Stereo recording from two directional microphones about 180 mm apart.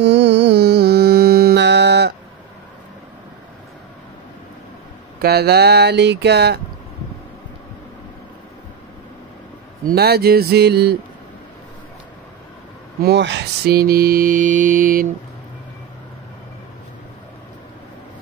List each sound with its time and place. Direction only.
0.0 s music: 75° right (ahead or behind)
5.2 s speech: 60° right (ahead or behind)
9.8 s speech: 60° right (ahead or behind)
13.0 s mantra: 75° right (ahead or behind); by 15.0 s 50° right (ahead or behind)